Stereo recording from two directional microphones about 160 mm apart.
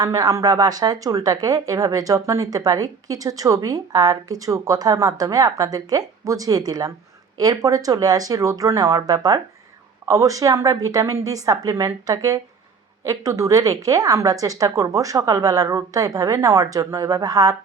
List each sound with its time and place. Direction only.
0.0 s speech: 20° right (ahead or behind)